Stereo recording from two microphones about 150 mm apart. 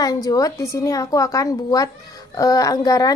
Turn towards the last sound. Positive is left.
turn(degrees=25)  # may be behind; listen again after turning